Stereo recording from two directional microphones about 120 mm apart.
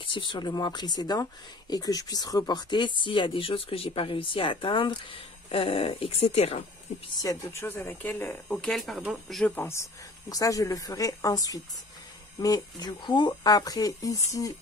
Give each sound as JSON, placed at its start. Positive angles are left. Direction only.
{"t": 0.0, "sound": "speech", "side_deg": 40}
{"t": 7.2, "sound": "speech", "side_deg": 30}
{"t": 7.6, "sound": "speech", "side_deg": 15}
{"t": 8.5, "sound": "speech", "side_deg": 5}
{"t": 9.6, "sound": "speech", "side_deg": 20}